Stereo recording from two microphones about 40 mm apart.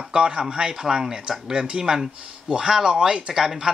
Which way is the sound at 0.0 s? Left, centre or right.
Right.